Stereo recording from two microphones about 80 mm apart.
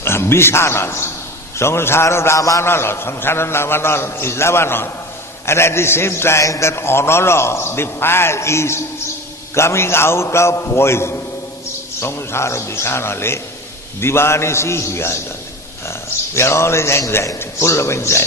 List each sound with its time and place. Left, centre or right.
0.0 s a man's voice: left